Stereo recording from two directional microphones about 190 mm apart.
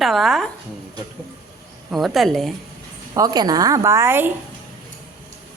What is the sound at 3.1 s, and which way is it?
Speech, 20° right (ahead or behind).